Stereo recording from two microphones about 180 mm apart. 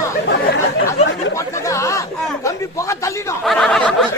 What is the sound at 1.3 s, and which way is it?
Chatter, 15° left (ahead or behind).